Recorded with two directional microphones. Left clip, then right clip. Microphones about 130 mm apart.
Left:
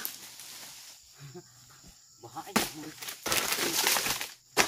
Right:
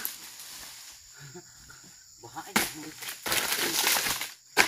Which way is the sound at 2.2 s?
Centre (ahead or behind).